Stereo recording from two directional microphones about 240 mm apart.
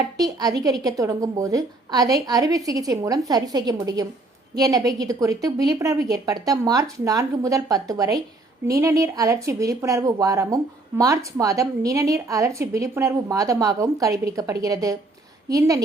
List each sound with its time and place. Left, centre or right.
0.2 s speech: centre